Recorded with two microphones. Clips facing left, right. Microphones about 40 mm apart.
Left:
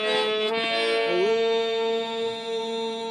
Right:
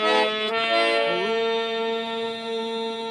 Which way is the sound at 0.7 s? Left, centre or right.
Right.